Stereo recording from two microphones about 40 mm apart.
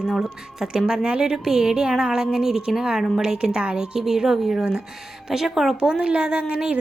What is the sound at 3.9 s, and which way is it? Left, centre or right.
A woman's voice, centre.